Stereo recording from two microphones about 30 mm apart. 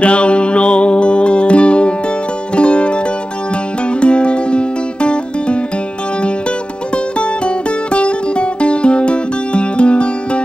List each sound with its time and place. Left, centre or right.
0.0 s music: left
4.0 s music: left
7.2 s music: left